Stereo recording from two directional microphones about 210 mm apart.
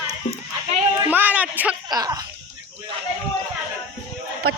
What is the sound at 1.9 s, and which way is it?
Speech, 20° right (ahead or behind).